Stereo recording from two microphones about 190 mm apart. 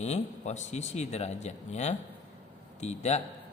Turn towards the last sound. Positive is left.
turn(degrees=35)  # may be behind; listen again after turning